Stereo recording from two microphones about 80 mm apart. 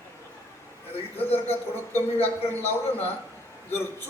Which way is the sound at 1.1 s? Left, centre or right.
Left.